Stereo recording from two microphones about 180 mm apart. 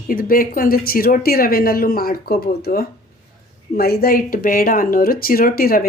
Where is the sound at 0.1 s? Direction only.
50° left (ahead or behind).